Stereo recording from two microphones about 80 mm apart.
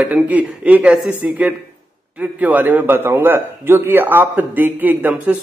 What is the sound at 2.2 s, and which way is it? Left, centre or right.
A man's voice, right.